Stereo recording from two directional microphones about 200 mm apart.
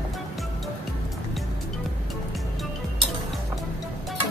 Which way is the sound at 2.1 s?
Centre (ahead or behind).